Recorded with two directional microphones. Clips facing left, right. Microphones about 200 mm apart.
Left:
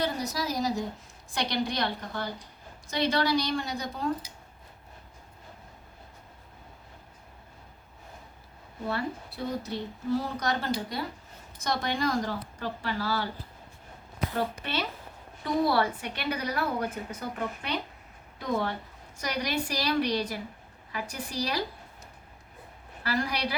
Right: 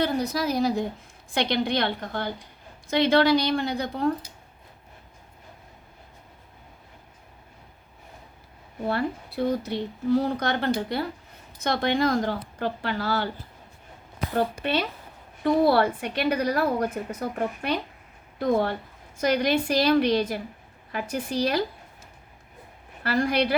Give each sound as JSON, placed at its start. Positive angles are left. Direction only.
{"t": 0.0, "sound": "a woman's voice", "side_deg": -55}
{"t": 8.9, "sound": "a woman's voice", "side_deg": -60}
{"t": 14.6, "sound": "a woman's voice", "side_deg": -55}
{"t": 23.0, "sound": "a woman's voice", "side_deg": -50}